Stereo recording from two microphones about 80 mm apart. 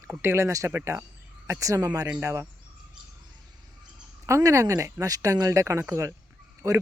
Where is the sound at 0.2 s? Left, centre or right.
Right.